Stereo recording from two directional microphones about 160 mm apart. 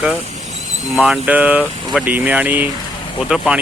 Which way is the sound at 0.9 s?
Centre (ahead or behind).